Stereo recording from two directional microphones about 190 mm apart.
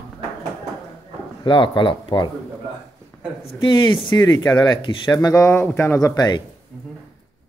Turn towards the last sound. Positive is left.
turn(degrees=25)  # may be behind; listen again after turning